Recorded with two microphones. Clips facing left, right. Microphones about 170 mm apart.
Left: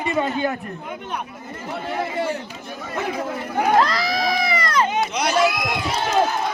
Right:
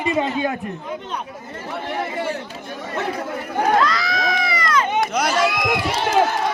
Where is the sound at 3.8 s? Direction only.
35° left (ahead or behind).